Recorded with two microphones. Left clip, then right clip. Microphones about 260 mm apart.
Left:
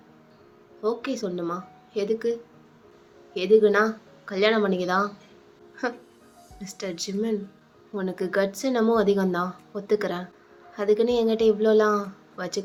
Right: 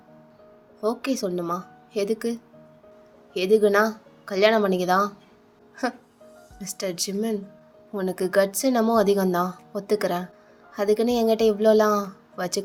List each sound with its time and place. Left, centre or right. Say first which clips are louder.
0.8 s a woman's voice: right 2 dB; right